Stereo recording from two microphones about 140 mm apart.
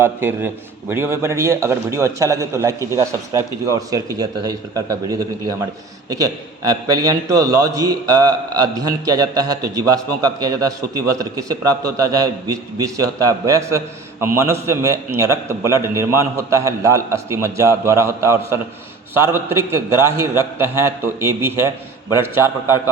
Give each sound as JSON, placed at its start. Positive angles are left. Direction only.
{"t": 0.0, "sound": "a man's voice", "side_deg": -15}